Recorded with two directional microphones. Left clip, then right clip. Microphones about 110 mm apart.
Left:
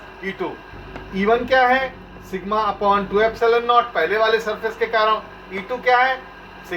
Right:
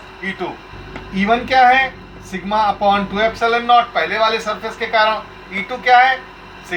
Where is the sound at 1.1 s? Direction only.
40° left (ahead or behind).